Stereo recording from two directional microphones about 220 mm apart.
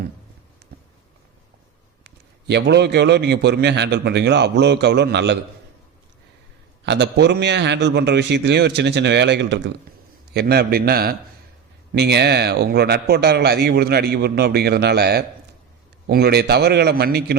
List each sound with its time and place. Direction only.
0.6 s a sound: 50° right (ahead or behind)
2.0 s a man's voice: 50° right (ahead or behind)
6.8 s a man's voice: 50° right (ahead or behind)